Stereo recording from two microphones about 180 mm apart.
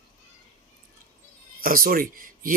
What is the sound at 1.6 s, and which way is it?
Speech, 50° right (ahead or behind).